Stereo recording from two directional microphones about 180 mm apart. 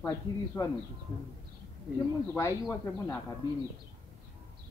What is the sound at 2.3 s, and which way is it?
Speech, 15° left (ahead or behind).